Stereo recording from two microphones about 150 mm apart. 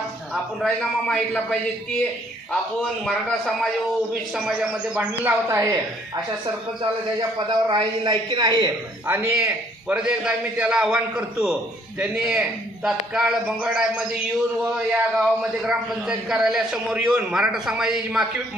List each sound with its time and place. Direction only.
0.3 s a man's voice: 5° left (ahead or behind)
3.1 s a man's voice: 5° left (ahead or behind)
5.5 s speech: 20° right (ahead or behind)
6.8 s a man's voice: 30° right (ahead or behind)
9.0 s a man's voice: 15° right (ahead or behind)